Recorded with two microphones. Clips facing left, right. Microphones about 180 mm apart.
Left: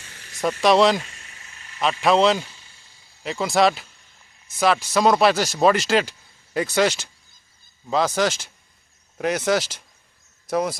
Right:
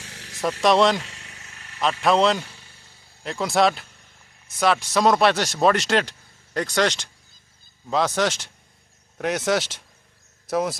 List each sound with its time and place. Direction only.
0.0 s vehicle: 75° right (ahead or behind)
0.6 s speech: centre (ahead or behind)
1.0 s a sound: 70° right (ahead or behind)
1.8 s speech: centre (ahead or behind)